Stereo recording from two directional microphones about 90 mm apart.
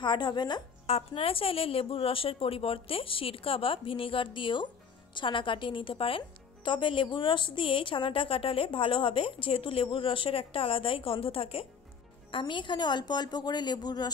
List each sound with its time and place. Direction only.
0.0 s speech: 55° left (ahead or behind)
1.1 s a woman's voice: 90° left
12.3 s a woman's voice: 70° left (ahead or behind); by 14.1 s 50° left (ahead or behind)